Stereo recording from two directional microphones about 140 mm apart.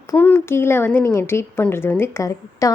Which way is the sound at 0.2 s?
15° left (ahead or behind).